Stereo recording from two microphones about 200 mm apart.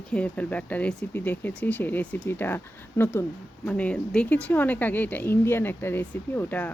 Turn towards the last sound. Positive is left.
turn(degrees=10)  # may be behind; listen again after turning